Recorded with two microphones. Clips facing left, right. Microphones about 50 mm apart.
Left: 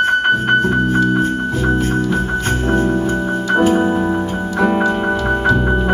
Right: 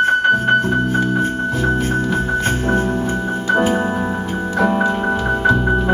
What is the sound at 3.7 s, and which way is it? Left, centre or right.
Music, centre.